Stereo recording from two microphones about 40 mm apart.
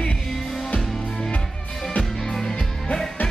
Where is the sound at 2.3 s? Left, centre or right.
Centre.